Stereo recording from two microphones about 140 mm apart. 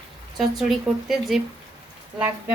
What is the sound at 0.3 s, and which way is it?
Speech, centre (ahead or behind).